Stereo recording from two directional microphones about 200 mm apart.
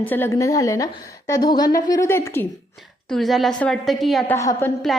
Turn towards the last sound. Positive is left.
turn(degrees=10)  # may be behind; listen again after turning